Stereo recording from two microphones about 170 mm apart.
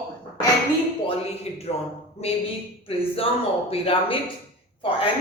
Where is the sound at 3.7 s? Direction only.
30° left (ahead or behind).